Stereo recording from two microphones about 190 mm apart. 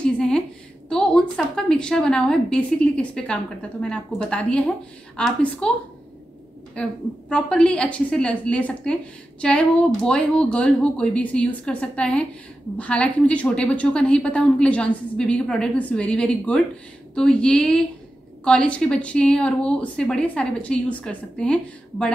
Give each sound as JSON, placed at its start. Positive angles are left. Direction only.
{"t": 0.0, "sound": "a sound", "side_deg": 5}
{"t": 0.8, "sound": "a woman's voice", "side_deg": 5}
{"t": 6.7, "sound": "a woman's voice", "side_deg": 5}